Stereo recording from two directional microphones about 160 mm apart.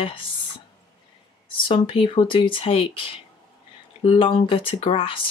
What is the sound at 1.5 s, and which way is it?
Speech, 35° left (ahead or behind).